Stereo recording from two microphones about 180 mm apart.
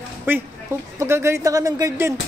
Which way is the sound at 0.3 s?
10° right (ahead or behind).